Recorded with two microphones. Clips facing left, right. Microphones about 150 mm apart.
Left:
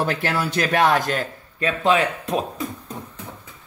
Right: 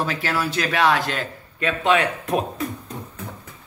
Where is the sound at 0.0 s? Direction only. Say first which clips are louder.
Left 1 dB; 55° left (ahead or behind); by 2.3 s 35° left (ahead or behind).